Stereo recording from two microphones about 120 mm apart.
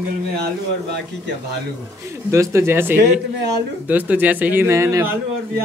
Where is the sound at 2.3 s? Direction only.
25° right (ahead or behind).